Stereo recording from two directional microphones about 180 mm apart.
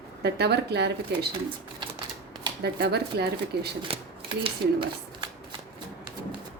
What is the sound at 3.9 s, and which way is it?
Speech, 30° right (ahead or behind).